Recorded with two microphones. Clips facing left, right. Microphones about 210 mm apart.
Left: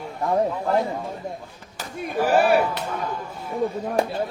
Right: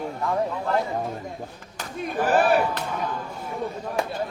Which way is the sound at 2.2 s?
10° left (ahead or behind).